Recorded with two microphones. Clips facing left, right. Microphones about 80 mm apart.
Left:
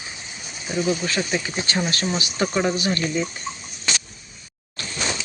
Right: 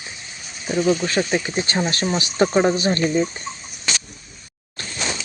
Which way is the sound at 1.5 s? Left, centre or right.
Right.